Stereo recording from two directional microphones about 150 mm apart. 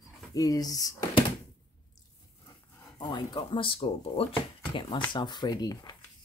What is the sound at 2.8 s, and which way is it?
Speech, 30° left (ahead or behind).